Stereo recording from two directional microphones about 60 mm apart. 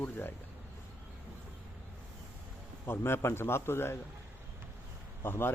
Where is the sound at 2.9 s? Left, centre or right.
Left.